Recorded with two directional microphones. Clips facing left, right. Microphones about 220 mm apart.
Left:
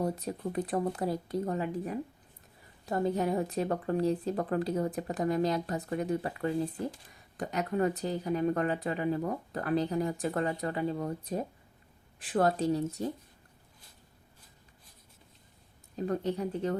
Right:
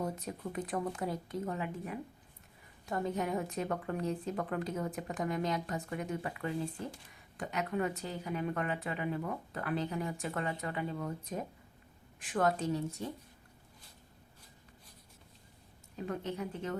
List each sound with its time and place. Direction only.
0.0 s speech: 35° left (ahead or behind)
16.0 s speech: 35° left (ahead or behind)